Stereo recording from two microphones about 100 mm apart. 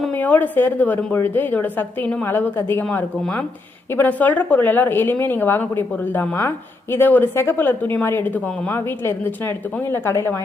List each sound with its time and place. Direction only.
0.2 s a woman's voice: 15° left (ahead or behind)
9.9 s a woman's voice: 25° left (ahead or behind)